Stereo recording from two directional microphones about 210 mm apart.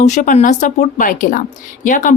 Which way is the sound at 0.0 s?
35° left (ahead or behind).